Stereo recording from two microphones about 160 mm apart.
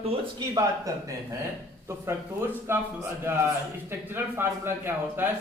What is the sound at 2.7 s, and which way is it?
Speech, 15° right (ahead or behind).